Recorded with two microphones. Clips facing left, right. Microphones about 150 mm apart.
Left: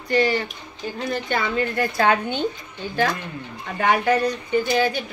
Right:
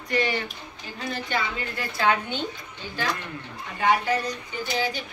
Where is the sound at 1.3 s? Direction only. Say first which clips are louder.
Left 7 dB; 50° left (ahead or behind).